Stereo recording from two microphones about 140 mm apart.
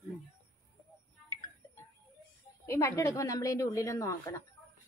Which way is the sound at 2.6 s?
20° left (ahead or behind).